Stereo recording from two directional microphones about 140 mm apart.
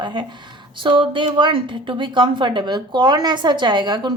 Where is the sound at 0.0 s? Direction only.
30° right (ahead or behind).